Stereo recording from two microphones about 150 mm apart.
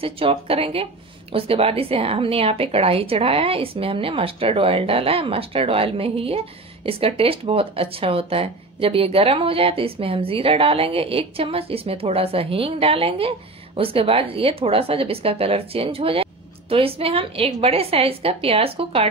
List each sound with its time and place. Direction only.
0.0 s speech: 40° right (ahead or behind)